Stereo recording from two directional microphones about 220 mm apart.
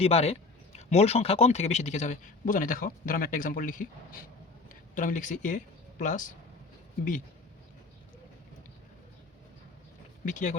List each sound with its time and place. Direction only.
0.0 s speech: 30° left (ahead or behind)
10.2 s speech: 35° left (ahead or behind)